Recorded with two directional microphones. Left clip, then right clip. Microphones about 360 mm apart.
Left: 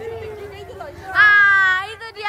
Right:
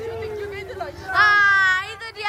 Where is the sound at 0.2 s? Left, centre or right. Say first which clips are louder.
Right 3 dB; right.